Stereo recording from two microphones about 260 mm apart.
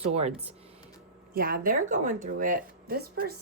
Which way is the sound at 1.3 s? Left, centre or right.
Right.